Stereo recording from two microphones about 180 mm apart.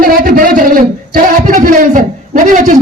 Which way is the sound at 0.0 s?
55° right (ahead or behind).